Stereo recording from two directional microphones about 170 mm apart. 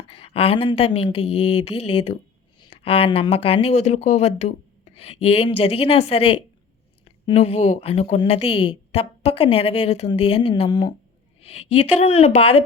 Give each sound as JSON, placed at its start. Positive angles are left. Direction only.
{"t": 0.1, "sound": "speech", "side_deg": 35}
{"t": 11.3, "sound": "speech", "side_deg": 40}